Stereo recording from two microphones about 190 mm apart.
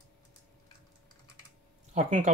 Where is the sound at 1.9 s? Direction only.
35° right (ahead or behind).